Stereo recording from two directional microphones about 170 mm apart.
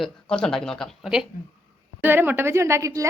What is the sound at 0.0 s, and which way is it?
A woman's voice, 5° left (ahead or behind).